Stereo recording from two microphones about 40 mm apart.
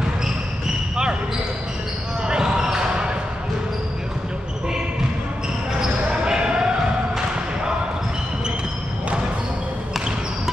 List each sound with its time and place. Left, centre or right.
2.2 s basketball bounce: centre
6.2 s basketball bounce: centre
9.9 s basketball bounce: centre